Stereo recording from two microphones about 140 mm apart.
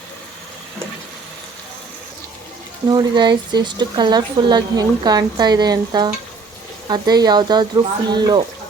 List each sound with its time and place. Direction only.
2.8 s speech: 30° right (ahead or behind)